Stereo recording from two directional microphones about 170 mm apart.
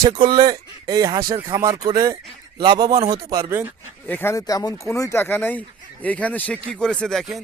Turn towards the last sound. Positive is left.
turn(degrees=0)  # may be behind; listen again after turning